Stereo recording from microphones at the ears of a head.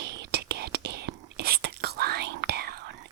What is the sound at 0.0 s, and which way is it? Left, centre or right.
Whispering, right.